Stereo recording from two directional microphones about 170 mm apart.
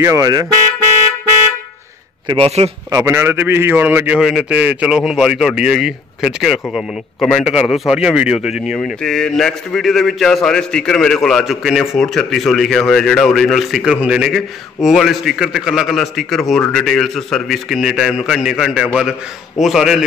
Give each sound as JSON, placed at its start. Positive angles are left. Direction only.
{"t": 0.0, "sound": "speech", "side_deg": -20}
{"t": 2.2, "sound": "a man's voice", "side_deg": -30}
{"t": 2.9, "sound": "a man's voice", "side_deg": -20}